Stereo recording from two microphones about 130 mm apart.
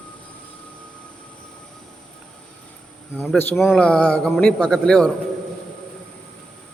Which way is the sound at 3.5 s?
Centre (ahead or behind).